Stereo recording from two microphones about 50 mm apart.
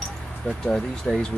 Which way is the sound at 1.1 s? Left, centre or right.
Centre.